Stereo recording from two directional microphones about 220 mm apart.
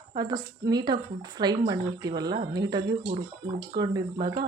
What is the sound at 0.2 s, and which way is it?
Speech, 20° right (ahead or behind).